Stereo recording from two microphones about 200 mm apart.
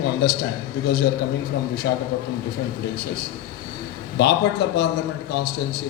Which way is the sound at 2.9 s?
50° left (ahead or behind).